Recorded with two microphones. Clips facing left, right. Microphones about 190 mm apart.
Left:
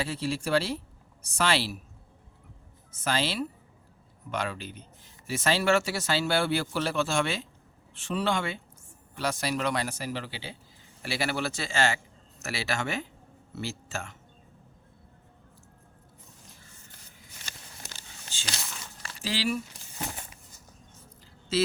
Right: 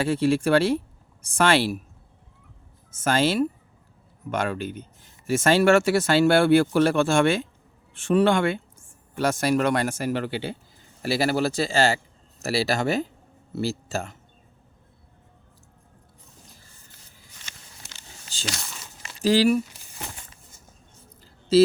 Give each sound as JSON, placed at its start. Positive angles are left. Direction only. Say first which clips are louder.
{"t": 0.0, "sound": "speech", "louder": "right 10 dB", "side_deg": -55}
{"t": 2.9, "sound": "speech", "louder": "right 7 dB", "side_deg": -45}
{"t": 11.0, "sound": "speech", "louder": "right 8 dB", "side_deg": -40}
{"t": 19.2, "sound": "speech", "louder": "right 11 dB", "side_deg": -45}
{"t": 21.5, "sound": "speech", "louder": "right 11 dB", "side_deg": -35}